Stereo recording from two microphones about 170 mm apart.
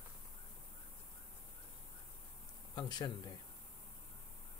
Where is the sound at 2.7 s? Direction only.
25° left (ahead or behind).